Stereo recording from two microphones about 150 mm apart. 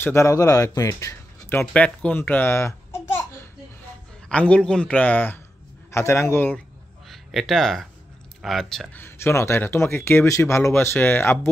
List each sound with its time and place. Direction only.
0.0 s speech: 20° left (ahead or behind)
4.3 s speech: 10° left (ahead or behind)
7.1 s speech: centre (ahead or behind)
9.0 s speech: 20° left (ahead or behind)